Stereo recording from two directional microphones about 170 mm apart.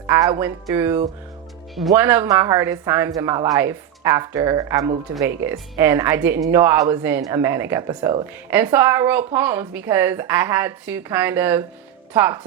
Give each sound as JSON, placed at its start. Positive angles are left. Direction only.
{"t": 0.1, "sound": "a woman's voice", "side_deg": -20}